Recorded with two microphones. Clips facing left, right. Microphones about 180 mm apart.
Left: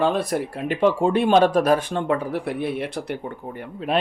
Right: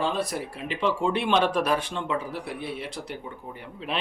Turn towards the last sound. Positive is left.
turn(degrees=50)  # may be behind; listen again after turning